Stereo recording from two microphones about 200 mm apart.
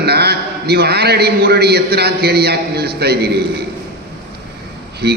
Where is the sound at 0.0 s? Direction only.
55° right (ahead or behind).